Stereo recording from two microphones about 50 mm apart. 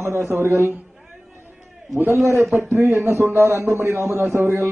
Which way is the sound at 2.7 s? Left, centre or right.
Right.